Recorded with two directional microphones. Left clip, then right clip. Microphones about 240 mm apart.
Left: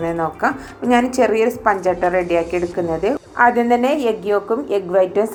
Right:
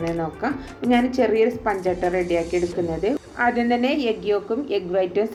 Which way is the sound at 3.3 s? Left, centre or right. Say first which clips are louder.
Left 8 dB; centre.